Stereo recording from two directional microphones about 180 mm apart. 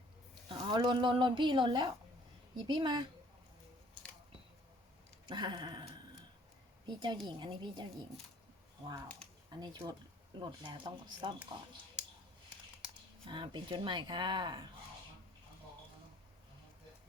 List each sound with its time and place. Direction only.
0.4 s speech: 25° right (ahead or behind)
5.2 s a sound: 25° right (ahead or behind)
6.8 s speech: 25° right (ahead or behind)
9.5 s speech: 25° right (ahead or behind)
13.2 s speech: 25° right (ahead or behind)